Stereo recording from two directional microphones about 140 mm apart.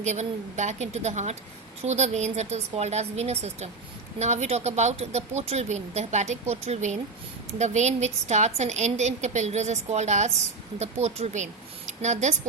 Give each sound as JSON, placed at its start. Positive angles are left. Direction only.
{"t": 0.0, "sound": "a woman's voice", "side_deg": -55}